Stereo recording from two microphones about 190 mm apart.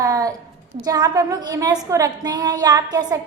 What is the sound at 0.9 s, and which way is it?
A woman's voice, 20° right (ahead or behind).